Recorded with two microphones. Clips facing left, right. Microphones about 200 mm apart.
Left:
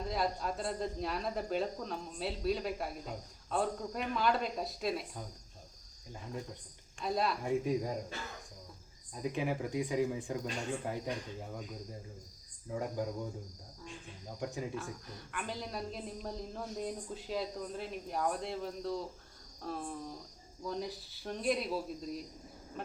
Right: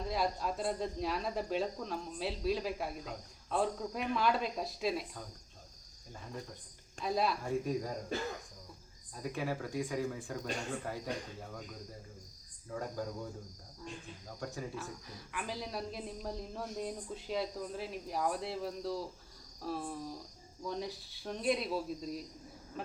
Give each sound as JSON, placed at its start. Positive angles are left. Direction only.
{"t": 0.0, "sound": "speech", "side_deg": 0}
{"t": 7.0, "sound": "speech", "side_deg": 0}
{"t": 7.4, "sound": "speech", "side_deg": 15}
{"t": 9.1, "sound": "speech", "side_deg": 20}
{"t": 12.7, "sound": "speech", "side_deg": 15}
{"t": 14.3, "sound": "speech", "side_deg": 15}
{"t": 14.8, "sound": "speech", "side_deg": 0}